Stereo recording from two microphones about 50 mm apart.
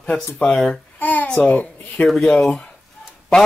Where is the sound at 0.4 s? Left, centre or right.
Centre.